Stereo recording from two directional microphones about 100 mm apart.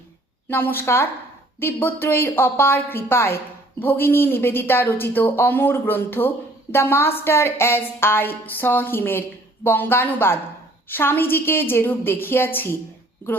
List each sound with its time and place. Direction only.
0.4 s a woman's voice: 20° left (ahead or behind)